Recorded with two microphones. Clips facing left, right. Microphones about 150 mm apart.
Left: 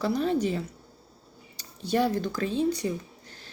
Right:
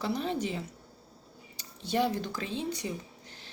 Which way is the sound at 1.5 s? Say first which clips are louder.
Left 4 dB; 20° right (ahead or behind).